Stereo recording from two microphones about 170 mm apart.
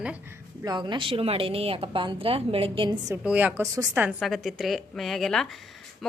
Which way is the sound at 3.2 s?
10° right (ahead or behind).